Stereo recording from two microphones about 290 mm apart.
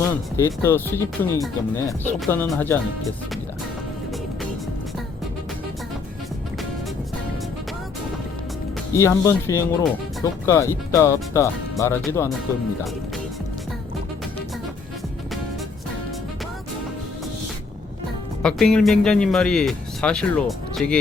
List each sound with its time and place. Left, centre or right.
0.3 s speech: centre
9.0 s speech: centre
18.4 s speech: centre